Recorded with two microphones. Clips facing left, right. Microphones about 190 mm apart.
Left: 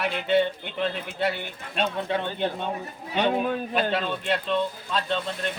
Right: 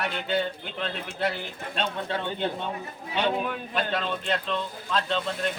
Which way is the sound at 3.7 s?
5° left (ahead or behind).